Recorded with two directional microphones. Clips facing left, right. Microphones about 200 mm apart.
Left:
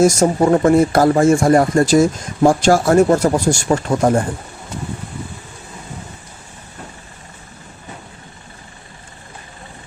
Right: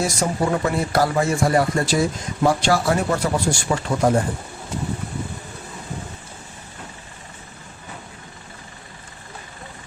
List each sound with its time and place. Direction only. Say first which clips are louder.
0.0 s speech: left 9 dB; 45° left (ahead or behind)